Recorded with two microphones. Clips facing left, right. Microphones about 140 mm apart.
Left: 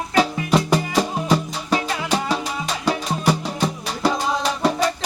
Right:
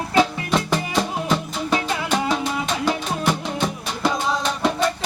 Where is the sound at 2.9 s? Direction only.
5° left (ahead or behind).